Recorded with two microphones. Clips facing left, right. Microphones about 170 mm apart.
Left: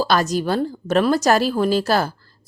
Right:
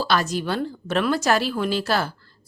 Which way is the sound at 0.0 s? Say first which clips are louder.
Left 4 dB; 40° left (ahead or behind).